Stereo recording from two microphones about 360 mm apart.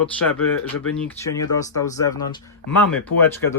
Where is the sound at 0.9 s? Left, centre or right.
Centre.